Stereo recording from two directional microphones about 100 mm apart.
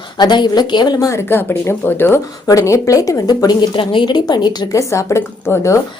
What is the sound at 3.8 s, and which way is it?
Speech, 55° left (ahead or behind).